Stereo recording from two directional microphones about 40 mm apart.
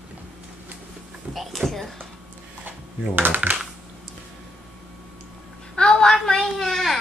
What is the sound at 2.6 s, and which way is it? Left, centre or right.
Speech, right.